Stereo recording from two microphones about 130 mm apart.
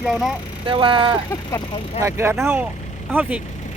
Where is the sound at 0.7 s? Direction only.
40° right (ahead or behind).